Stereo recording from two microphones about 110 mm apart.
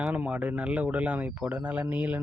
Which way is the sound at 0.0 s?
10° right (ahead or behind).